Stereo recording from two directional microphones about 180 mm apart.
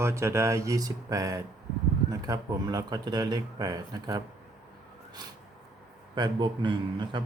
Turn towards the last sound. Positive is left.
turn(degrees=-25)  # may be behind; listen again after turning